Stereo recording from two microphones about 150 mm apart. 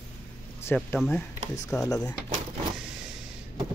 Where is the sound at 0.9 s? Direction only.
Centre (ahead or behind).